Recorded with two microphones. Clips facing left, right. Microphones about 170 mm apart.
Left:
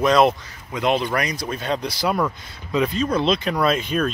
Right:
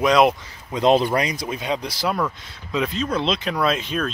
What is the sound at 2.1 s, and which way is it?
Speech, 5° left (ahead or behind).